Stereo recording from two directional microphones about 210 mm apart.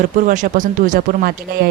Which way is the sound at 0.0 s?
40° right (ahead or behind).